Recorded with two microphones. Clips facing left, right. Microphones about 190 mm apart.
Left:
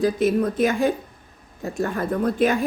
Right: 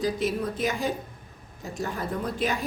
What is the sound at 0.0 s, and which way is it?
Speech, 50° left (ahead or behind).